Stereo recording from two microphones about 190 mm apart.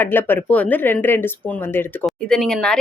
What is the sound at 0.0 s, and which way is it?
A woman's voice, 10° left (ahead or behind).